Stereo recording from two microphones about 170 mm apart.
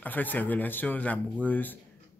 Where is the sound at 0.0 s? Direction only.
10° left (ahead or behind).